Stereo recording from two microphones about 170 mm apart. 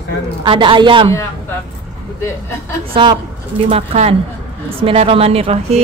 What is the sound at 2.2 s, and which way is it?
Speech, 15° left (ahead or behind).